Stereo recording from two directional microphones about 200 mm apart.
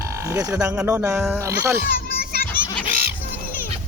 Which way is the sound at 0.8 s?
10° right (ahead or behind).